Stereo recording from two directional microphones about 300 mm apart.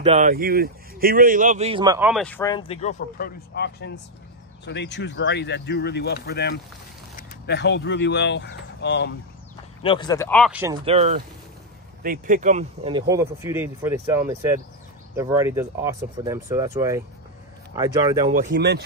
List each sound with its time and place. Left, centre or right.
0.0 s speech: right; by 9.1 s left
9.8 s speech: centre
10.9 s speech: right
13.1 s speech: centre
18.3 s speech: right